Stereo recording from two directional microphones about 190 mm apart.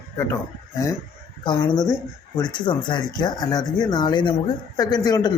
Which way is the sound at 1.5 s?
25° left (ahead or behind).